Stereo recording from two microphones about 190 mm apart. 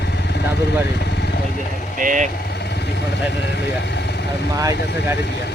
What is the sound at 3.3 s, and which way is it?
Speech, 65° left (ahead or behind).